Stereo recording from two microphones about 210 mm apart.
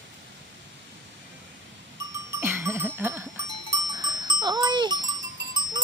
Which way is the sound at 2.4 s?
10° right (ahead or behind).